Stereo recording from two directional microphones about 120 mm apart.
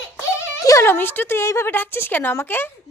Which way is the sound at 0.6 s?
25° left (ahead or behind).